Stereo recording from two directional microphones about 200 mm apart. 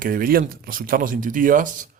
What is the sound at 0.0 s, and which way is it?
Speech, 45° right (ahead or behind).